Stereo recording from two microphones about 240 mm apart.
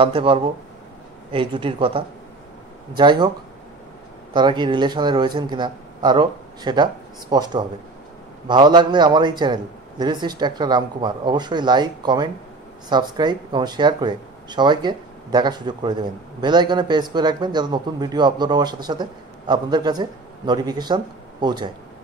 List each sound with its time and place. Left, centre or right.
0.0 s a man's voice: right
4.3 s a man's voice: centre